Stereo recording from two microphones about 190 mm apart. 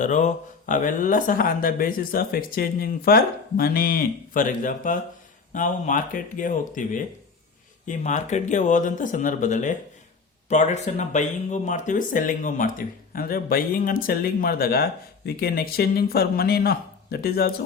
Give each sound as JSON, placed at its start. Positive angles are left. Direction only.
{"t": 0.0, "sound": "speech", "side_deg": 40}